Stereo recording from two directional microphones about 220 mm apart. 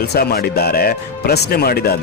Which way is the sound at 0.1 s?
45° left (ahead or behind).